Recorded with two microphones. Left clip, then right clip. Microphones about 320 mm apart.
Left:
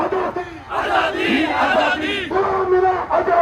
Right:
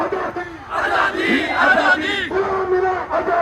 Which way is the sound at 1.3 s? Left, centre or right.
Centre.